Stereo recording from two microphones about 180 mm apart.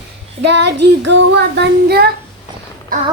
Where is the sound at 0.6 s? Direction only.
70° right (ahead or behind).